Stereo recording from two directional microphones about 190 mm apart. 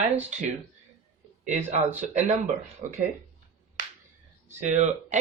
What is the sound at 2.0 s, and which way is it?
Speech, 40° right (ahead or behind).